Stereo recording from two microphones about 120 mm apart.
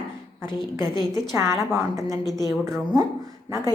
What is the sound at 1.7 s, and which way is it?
Speech, 25° right (ahead or behind).